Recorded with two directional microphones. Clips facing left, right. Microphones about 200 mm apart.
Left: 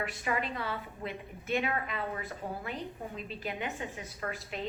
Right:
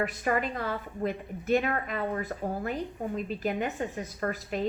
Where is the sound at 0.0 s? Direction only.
45° right (ahead or behind).